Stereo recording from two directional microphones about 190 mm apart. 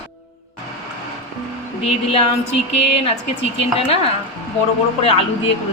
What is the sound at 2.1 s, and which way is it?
Speech, 35° left (ahead or behind).